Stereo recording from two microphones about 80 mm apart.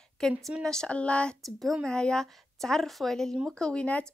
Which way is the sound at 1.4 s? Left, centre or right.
Centre.